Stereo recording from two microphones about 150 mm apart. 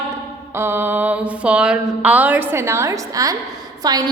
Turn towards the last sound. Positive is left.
turn(degrees=-25)  # may be behind; listen again after turning